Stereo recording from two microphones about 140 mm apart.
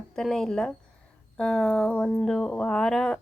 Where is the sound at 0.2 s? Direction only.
5° left (ahead or behind).